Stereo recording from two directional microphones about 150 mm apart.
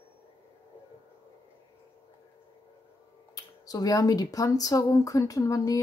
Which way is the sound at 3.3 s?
25° left (ahead or behind).